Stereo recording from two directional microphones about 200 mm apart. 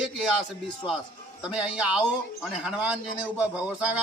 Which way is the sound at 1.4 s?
5° right (ahead or behind).